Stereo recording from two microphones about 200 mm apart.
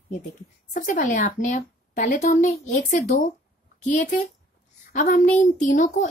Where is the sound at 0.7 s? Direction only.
40° left (ahead or behind).